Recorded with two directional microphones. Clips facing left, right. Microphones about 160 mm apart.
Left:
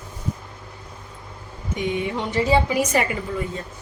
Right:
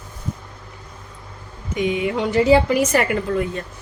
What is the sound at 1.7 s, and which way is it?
A woman's voice, 90° right.